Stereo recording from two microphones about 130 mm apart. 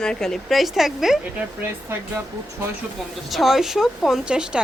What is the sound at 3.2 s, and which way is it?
A woman's voice, centre (ahead or behind).